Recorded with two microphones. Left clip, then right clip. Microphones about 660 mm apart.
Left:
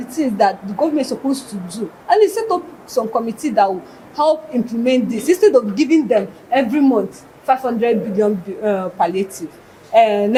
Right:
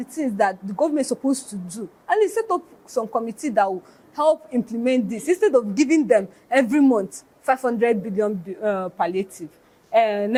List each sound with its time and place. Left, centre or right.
0.2 s speech: right